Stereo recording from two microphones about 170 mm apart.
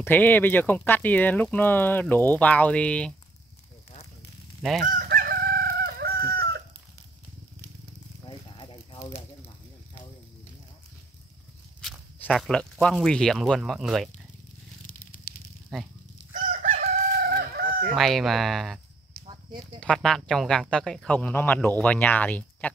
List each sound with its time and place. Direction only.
0.0 s speech: 10° left (ahead or behind)
4.6 s goose: centre (ahead or behind)
4.8 s chicken: 55° right (ahead or behind)
8.3 s a sound: 30° left (ahead or behind)
11.8 s speech: centre (ahead or behind)
15.7 s speech: centre (ahead or behind)
17.4 s chicken: 60° right (ahead or behind)
17.8 s speech: centre (ahead or behind)
19.2 s a sound: 25° right (ahead or behind)
19.8 s speech: 5° left (ahead or behind)